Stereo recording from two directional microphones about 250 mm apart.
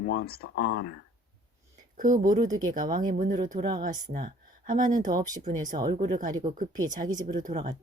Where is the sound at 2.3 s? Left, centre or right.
Right.